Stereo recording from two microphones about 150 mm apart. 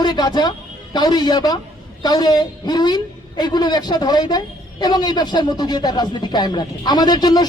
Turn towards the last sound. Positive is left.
turn(degrees=25)  # may be behind; listen again after turning